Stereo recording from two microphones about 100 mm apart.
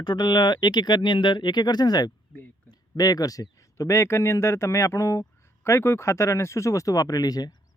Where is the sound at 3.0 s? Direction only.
40° left (ahead or behind).